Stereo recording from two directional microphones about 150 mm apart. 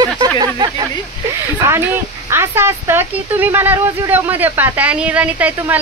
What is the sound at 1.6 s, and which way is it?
Speech, 15° right (ahead or behind).